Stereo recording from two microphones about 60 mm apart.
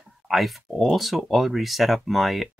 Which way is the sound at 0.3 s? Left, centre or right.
Centre.